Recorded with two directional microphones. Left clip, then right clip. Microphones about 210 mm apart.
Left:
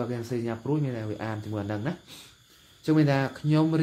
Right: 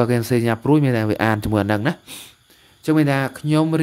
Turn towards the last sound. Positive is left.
turn(degrees=-30)  # may be behind; listen again after turning